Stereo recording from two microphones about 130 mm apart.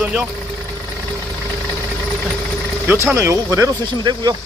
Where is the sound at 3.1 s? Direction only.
25° right (ahead or behind).